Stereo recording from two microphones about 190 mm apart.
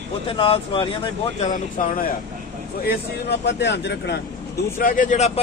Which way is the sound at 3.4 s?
65° left (ahead or behind).